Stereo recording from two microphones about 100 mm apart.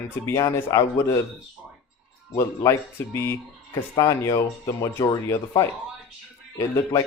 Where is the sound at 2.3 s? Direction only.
30° left (ahead or behind).